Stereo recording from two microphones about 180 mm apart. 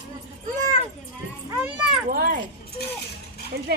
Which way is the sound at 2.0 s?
55° right (ahead or behind).